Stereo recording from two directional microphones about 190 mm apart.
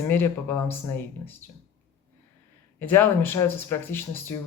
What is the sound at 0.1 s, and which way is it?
Speech, 10° left (ahead or behind).